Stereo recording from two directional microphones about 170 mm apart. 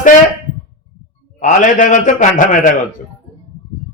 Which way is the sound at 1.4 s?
50° left (ahead or behind).